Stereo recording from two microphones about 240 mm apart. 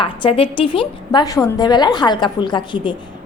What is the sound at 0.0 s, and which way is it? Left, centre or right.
A woman's voice, left.